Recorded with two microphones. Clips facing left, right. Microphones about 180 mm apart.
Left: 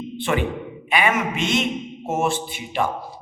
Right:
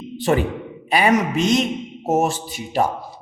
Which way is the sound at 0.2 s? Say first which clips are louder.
Right 4 dB; 40° right (ahead or behind).